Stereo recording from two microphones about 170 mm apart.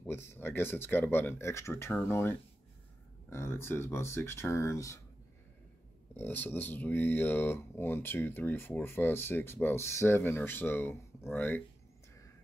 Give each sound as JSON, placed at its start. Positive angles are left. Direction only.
{"t": 0.0, "sound": "speech", "side_deg": 15}
{"t": 6.1, "sound": "speech", "side_deg": 10}